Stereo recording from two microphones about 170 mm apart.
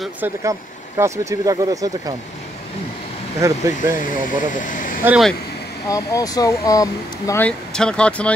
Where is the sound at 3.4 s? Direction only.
15° right (ahead or behind).